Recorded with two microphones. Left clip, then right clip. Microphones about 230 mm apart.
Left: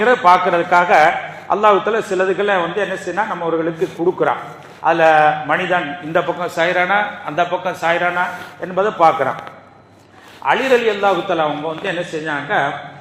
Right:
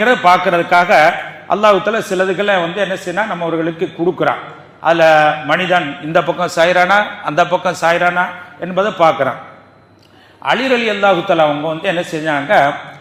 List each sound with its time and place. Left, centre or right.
0.0 s a man's voice: right
10.4 s a man's voice: right